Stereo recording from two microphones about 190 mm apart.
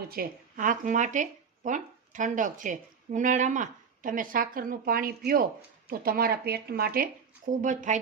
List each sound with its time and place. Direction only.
0.1 s speech: 45° right (ahead or behind)